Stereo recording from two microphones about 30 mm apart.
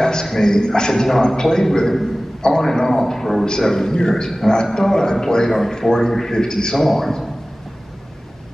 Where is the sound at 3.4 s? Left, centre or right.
Centre.